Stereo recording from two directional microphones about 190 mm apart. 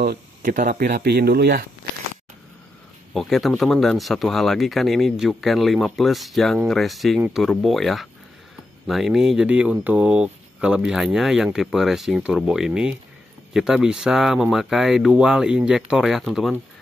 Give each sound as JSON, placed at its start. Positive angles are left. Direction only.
{"t": 0.0, "sound": "speech", "side_deg": -50}
{"t": 3.1, "sound": "speech", "side_deg": 0}